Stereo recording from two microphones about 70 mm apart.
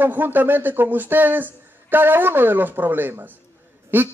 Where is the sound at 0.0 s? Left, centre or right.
Right.